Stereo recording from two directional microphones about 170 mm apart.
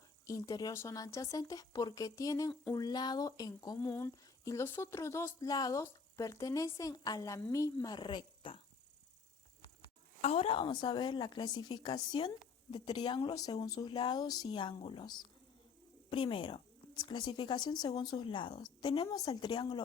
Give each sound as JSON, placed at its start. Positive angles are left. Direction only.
{"t": 0.3, "sound": "speech", "side_deg": 20}
{"t": 10.2, "sound": "speech", "side_deg": 40}